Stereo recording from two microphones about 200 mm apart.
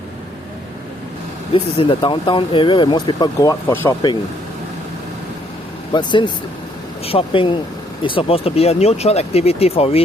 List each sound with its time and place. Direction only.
1.5 s speech: 25° left (ahead or behind)
5.9 s speech: 20° left (ahead or behind)